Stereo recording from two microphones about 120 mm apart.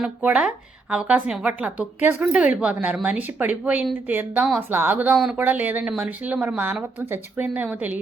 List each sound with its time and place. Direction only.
0.0 s a woman's voice: 10° right (ahead or behind)